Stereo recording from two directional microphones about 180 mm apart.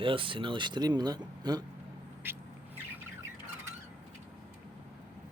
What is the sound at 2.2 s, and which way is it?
Vehicle, 10° right (ahead or behind).